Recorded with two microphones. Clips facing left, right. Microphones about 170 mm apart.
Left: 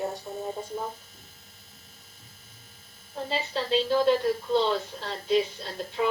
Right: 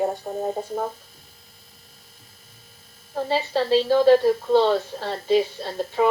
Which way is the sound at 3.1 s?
70° right (ahead or behind).